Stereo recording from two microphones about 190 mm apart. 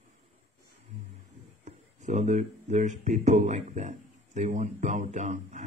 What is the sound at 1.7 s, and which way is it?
Speech, 40° right (ahead or behind).